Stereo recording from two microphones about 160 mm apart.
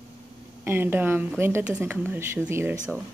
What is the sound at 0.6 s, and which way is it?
Speech, 15° right (ahead or behind).